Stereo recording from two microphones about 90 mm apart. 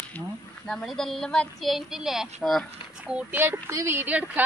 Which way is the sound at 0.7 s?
5° left (ahead or behind).